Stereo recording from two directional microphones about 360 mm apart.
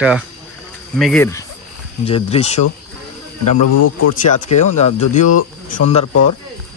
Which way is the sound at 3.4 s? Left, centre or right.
Left.